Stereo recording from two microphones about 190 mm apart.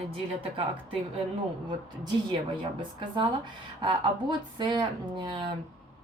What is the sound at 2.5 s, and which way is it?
Speech, 25° right (ahead or behind).